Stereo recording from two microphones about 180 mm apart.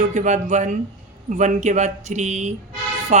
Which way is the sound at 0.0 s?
45° right (ahead or behind).